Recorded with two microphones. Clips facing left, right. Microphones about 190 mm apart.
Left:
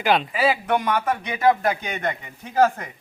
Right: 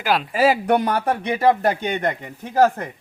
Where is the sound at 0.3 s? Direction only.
40° right (ahead or behind).